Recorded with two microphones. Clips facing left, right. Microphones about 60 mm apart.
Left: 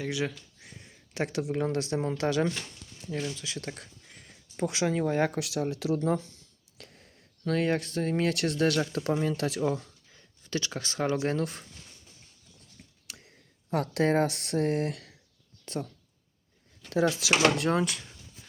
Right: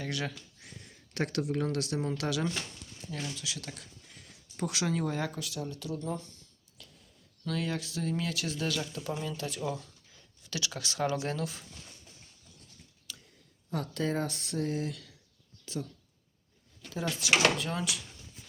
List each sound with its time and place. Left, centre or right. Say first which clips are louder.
0.0 s speech: left 4 dB; centre; by 3.8 s left
4.5 s speech: left 4 dB; left
5.2 s speech: left 8 dB; left
5.5 s speech: left 8 dB; left
6.7 s a sound: left 5 dB; left
7.4 s speech: left 7 dB; left
9.6 s speech: left 6 dB; left
13.1 s speech: right 1 dB; left
16.9 s speech: left 4 dB; left
17.7 s speech: left 8 dB; left